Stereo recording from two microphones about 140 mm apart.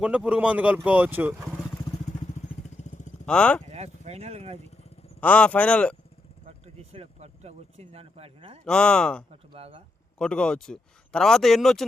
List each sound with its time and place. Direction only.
0.0 s speech: 5° right (ahead or behind)
2.6 s vehicle: 60° left (ahead or behind)
3.2 s speech: 5° left (ahead or behind)
3.7 s speech: 50° right (ahead or behind)
4.5 s vehicle: 50° left (ahead or behind)
5.2 s speech: 10° left (ahead or behind)
6.9 s speech: 50° right (ahead or behind)
8.6 s speech: 5° left (ahead or behind)
9.5 s speech: 40° right (ahead or behind)
10.2 s speech: 5° left (ahead or behind)